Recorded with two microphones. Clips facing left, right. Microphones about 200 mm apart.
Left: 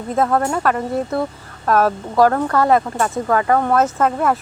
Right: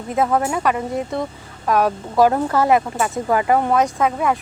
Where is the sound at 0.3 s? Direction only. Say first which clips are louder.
Left 1 dB; 5° right (ahead or behind).